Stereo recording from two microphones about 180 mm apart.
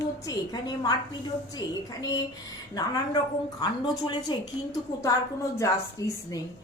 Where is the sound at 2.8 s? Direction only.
20° left (ahead or behind).